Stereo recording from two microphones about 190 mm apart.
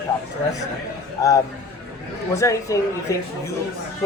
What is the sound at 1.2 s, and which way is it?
A man's voice, 20° left (ahead or behind).